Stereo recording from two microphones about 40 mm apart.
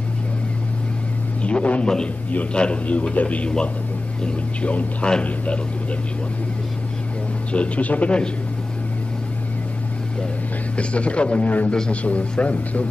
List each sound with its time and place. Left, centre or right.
1.4 s a man's voice: left
3.4 s a man's voice: left
7.5 s speech: left
10.8 s speech: left
11.4 s speech: left